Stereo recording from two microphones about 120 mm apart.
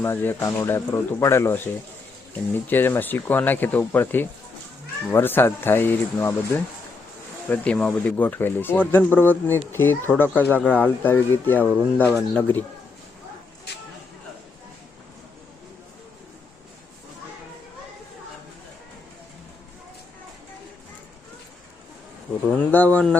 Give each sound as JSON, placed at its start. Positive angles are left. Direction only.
{"t": 0.0, "sound": "speech", "side_deg": 20}
{"t": 22.4, "sound": "speech", "side_deg": 10}